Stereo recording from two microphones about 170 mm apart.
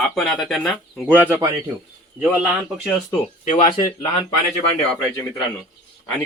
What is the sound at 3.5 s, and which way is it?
Speech, 30° left (ahead or behind).